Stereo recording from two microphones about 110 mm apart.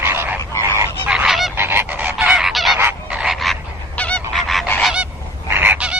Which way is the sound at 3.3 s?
Centre (ahead or behind).